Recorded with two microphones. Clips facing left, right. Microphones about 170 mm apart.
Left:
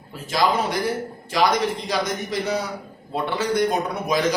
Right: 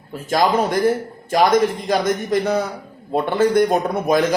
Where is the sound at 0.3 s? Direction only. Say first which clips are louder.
Right 4 dB; 50° right (ahead or behind).